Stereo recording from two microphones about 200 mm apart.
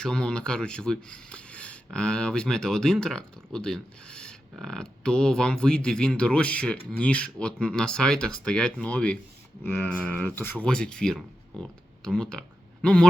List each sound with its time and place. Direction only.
0.0 s speech: 5° left (ahead or behind)